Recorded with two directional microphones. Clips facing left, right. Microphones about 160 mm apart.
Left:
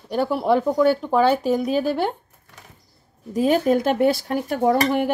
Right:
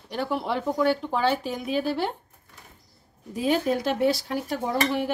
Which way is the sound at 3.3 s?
50° left (ahead or behind).